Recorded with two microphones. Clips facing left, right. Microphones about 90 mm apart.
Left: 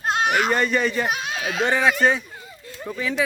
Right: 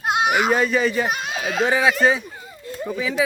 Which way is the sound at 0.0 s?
10° right (ahead or behind).